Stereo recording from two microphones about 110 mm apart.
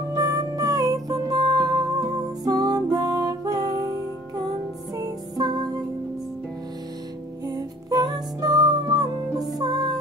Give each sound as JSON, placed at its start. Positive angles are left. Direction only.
{"t": 0.1, "sound": "music", "side_deg": -35}
{"t": 4.9, "sound": "music", "side_deg": -35}
{"t": 7.4, "sound": "music", "side_deg": -35}